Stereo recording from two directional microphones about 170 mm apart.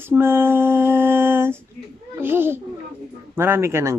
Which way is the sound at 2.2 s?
15° right (ahead or behind).